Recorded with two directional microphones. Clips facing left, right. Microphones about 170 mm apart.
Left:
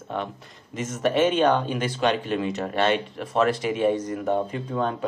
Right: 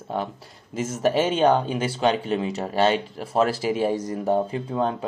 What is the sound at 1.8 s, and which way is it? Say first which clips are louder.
Speech: right 1 dB; 30° right (ahead or behind).